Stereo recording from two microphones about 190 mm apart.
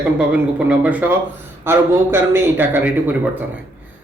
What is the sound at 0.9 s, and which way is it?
A man's voice, 10° right (ahead or behind).